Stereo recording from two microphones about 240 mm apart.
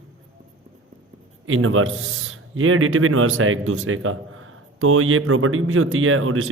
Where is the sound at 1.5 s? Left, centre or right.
Right.